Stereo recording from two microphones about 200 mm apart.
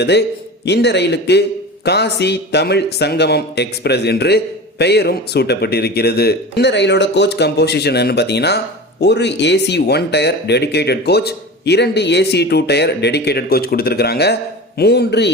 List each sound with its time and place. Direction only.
0.0 s speech: 55° left (ahead or behind)